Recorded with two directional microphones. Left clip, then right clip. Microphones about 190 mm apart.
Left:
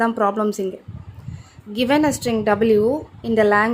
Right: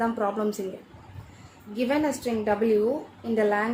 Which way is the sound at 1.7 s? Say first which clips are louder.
Left 7 dB; 50° left (ahead or behind).